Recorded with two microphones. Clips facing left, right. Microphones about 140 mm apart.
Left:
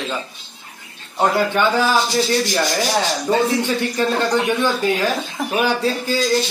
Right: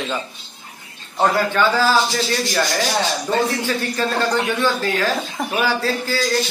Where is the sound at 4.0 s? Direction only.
20° left (ahead or behind).